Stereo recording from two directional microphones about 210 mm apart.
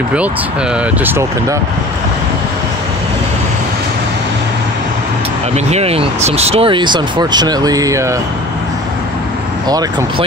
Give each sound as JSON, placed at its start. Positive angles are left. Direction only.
{"t": 1.0, "sound": "speech", "side_deg": -10}
{"t": 5.7, "sound": "speech", "side_deg": -30}
{"t": 9.7, "sound": "speech", "side_deg": -20}